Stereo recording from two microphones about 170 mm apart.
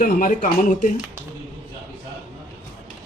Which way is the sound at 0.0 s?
55° left (ahead or behind).